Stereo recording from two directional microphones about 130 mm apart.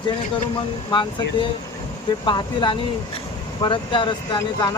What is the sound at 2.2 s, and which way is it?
Speech, 40° left (ahead or behind).